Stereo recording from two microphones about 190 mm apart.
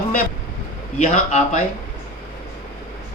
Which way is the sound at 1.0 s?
40° left (ahead or behind).